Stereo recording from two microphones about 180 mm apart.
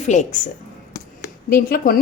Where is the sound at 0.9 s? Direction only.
55° left (ahead or behind).